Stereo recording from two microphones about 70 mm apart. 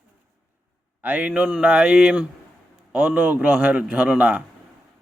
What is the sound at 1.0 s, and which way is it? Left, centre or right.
A man's voice, right.